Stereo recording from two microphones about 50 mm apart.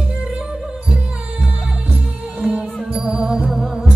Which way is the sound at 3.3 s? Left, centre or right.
Centre.